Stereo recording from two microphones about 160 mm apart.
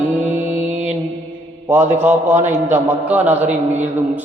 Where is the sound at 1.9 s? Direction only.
15° right (ahead or behind).